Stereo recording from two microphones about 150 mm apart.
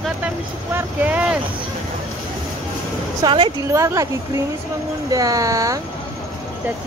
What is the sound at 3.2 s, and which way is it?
Speech, 35° right (ahead or behind).